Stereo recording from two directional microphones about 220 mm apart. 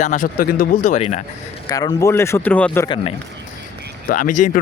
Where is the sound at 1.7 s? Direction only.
15° left (ahead or behind).